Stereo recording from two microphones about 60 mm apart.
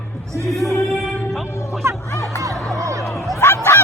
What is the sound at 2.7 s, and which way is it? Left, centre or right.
Music, right.